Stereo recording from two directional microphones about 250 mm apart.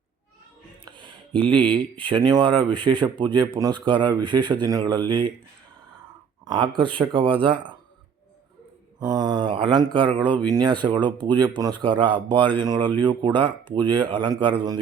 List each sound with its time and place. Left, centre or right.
0.9 s speech: centre
6.5 s speech: centre
9.0 s mantra: centre
10.2 s speech: centre